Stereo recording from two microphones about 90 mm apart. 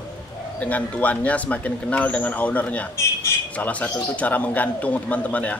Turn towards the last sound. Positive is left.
turn(degrees=15)  # may be behind; listen again after turning